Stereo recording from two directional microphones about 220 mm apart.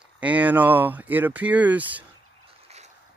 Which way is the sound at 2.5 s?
30° right (ahead or behind).